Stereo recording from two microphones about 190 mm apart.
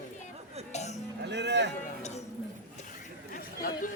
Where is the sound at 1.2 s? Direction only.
65° right (ahead or behind).